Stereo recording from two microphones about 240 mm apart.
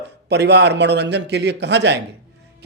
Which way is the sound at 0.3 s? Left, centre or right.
Right.